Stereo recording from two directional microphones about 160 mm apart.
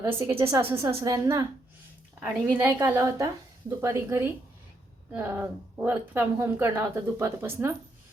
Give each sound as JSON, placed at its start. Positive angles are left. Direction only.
{"t": 0.3, "sound": "a woman's voice", "side_deg": -15}